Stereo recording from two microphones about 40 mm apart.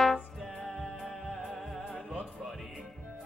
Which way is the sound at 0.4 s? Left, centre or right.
Centre.